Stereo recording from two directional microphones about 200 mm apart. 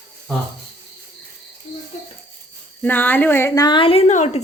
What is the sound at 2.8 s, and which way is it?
Speech, 10° left (ahead or behind).